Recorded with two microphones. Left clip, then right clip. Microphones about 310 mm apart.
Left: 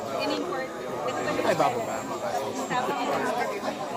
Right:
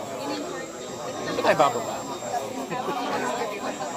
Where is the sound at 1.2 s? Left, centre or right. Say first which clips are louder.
Right 5 dB; centre.